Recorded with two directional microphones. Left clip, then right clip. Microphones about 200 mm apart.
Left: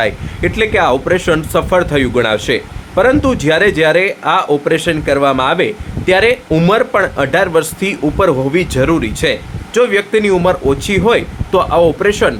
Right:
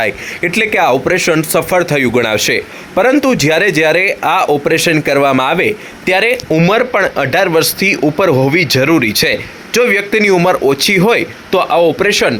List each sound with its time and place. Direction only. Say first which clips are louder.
0.0 s speech: even; 25° right (ahead or behind)